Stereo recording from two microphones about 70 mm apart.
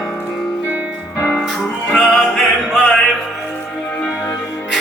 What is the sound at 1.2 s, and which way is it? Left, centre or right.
Music, centre.